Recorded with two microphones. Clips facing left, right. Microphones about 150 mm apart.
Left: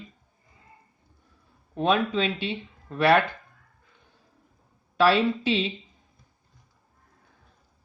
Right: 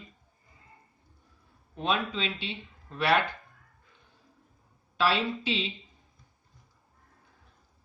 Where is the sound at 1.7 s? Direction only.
50° left (ahead or behind).